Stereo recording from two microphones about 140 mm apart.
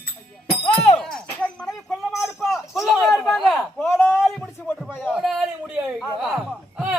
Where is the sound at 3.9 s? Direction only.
15° left (ahead or behind).